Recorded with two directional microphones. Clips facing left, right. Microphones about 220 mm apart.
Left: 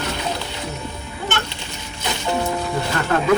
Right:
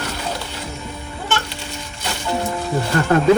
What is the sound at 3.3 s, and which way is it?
Speech, 30° right (ahead or behind).